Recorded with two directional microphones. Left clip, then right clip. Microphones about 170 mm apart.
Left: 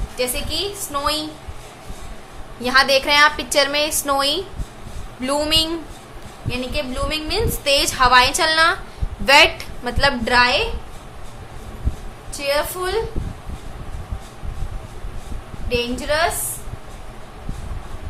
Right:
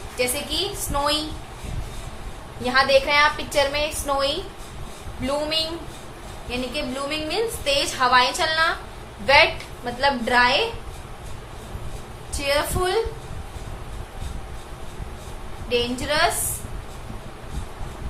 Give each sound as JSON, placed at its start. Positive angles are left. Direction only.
{"t": 0.2, "sound": "a woman's voice", "side_deg": 10}
{"t": 2.6, "sound": "a woman's voice", "side_deg": 35}
{"t": 6.5, "sound": "a woman's voice", "side_deg": 20}
{"t": 10.2, "sound": "a woman's voice", "side_deg": 25}
{"t": 12.4, "sound": "a woman's voice", "side_deg": 10}
{"t": 15.7, "sound": "a woman's voice", "side_deg": 15}